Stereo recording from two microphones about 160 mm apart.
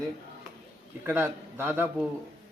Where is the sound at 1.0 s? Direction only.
15° right (ahead or behind).